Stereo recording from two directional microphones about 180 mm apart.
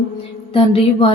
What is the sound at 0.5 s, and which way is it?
Speech, 30° left (ahead or behind).